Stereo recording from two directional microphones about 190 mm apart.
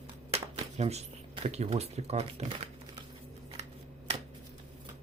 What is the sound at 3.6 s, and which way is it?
Shuffling cards, 35° right (ahead or behind).